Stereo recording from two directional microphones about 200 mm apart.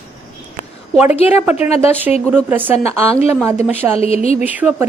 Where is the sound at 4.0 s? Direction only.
30° left (ahead or behind).